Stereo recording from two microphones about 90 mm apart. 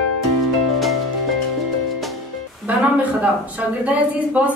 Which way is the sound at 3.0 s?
15° right (ahead or behind).